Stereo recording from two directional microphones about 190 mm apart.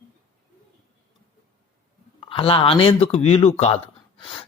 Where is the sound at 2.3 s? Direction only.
30° left (ahead or behind).